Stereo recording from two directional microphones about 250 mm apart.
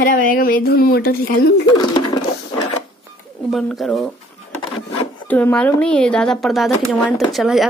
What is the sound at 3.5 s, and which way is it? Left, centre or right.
Speech, centre.